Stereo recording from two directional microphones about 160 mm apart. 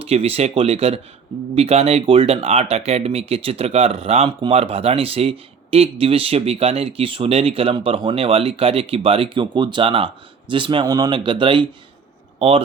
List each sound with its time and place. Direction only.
0.0 s speech: 40° right (ahead or behind)